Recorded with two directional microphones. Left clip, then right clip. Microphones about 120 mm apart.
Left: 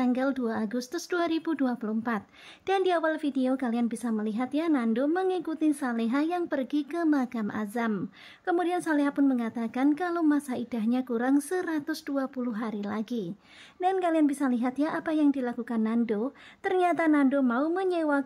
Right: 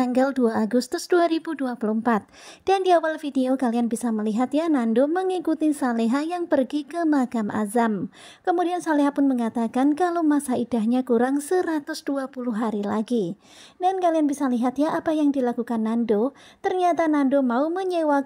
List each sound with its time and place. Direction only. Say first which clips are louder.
0.0 s a woman's voice: right 7 dB; 45° right (ahead or behind)
8.5 s a woman's voice: right 5 dB; 30° right (ahead or behind)
13.7 s a woman's voice: right 5 dB; 25° right (ahead or behind)
16.3 s a woman's voice: right 4 dB; 20° right (ahead or behind)